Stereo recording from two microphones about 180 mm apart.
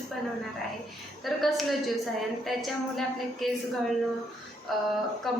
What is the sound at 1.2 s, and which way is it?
A woman's voice, centre (ahead or behind).